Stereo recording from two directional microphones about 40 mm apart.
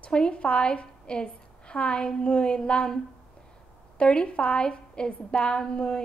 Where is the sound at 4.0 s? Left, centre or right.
Left.